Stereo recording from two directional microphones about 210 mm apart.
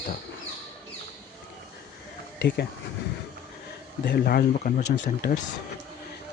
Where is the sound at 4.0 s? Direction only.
50° left (ahead or behind).